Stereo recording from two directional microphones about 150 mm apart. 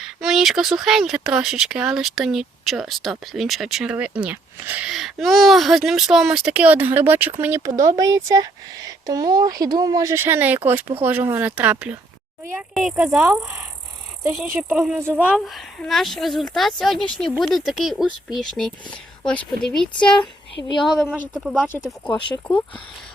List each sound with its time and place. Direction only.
0.0 s speech: 5° right (ahead or behind)
14.7 s speech: centre (ahead or behind)
21.1 s speech: 5° right (ahead or behind)
22.5 s speech: 30° left (ahead or behind)